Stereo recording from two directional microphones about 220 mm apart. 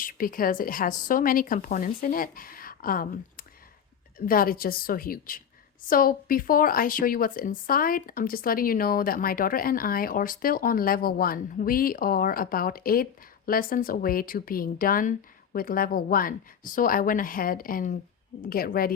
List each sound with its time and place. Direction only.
0.0 s speech: 40° left (ahead or behind)